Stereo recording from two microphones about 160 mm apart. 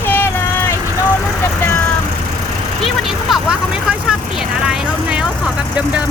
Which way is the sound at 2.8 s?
Centre (ahead or behind).